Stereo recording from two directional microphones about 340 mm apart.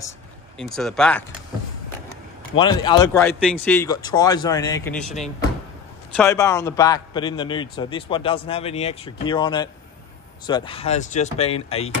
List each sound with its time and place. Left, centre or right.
0.6 s speech: centre
2.5 s a man's voice: centre
6.1 s a man's voice: centre